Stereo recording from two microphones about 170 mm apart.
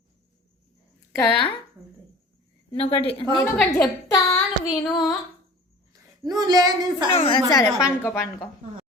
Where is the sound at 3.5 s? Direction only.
5° left (ahead or behind).